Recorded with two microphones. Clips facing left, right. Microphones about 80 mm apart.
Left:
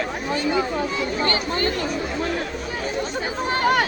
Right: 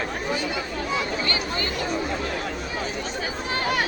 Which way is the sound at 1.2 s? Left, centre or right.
Left.